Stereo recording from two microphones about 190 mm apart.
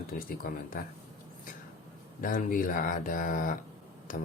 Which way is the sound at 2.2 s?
45° left (ahead or behind).